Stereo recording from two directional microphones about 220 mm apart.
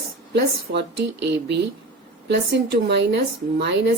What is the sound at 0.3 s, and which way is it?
Speech, 50° right (ahead or behind).